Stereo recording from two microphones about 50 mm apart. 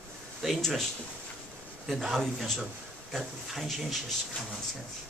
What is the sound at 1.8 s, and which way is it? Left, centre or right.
Speech, centre.